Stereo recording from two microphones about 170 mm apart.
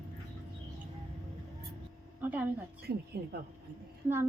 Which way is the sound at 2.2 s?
10° right (ahead or behind).